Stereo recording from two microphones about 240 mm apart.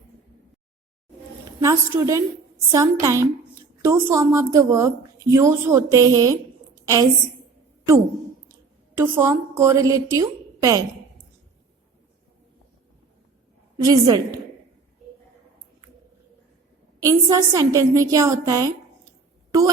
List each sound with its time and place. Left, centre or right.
1.6 s a woman's voice: centre
9.0 s a woman's voice: centre
13.8 s a woman's voice: centre
17.0 s a woman's voice: centre